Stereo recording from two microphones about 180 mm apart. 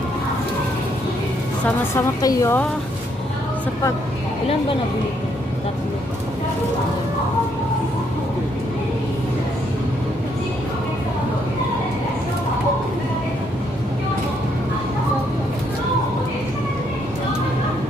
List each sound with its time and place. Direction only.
2.0 s a woman's voice: 15° left (ahead or behind)